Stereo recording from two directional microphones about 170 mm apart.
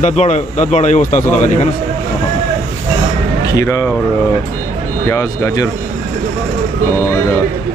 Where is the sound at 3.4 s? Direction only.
20° left (ahead or behind).